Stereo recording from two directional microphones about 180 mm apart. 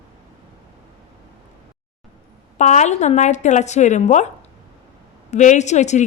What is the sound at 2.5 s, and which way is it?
A woman's voice, 40° left (ahead or behind).